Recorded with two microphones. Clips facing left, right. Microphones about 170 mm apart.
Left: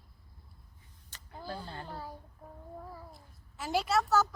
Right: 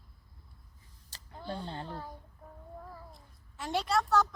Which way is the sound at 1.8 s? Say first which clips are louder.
Right 1 dB; 5° left (ahead or behind).